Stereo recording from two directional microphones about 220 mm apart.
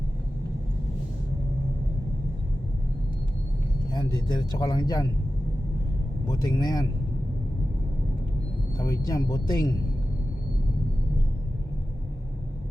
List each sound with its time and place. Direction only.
3.9 s speech: 20° left (ahead or behind)
6.2 s speech: 20° left (ahead or behind)
8.8 s speech: 15° left (ahead or behind)